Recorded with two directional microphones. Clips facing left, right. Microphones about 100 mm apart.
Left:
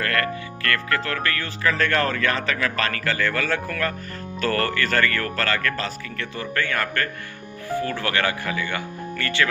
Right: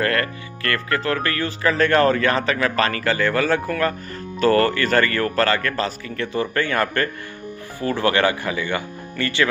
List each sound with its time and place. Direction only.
0.0 s speech: 25° right (ahead or behind)